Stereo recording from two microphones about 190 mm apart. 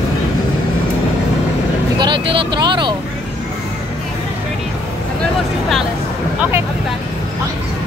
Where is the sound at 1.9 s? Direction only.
25° right (ahead or behind).